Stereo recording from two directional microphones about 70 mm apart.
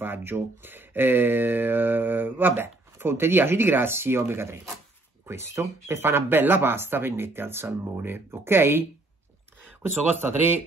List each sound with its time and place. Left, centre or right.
0.0 s speech: right
10.2 s speech: right